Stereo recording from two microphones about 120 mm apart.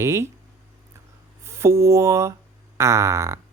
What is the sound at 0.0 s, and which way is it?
Speech, 20° right (ahead or behind).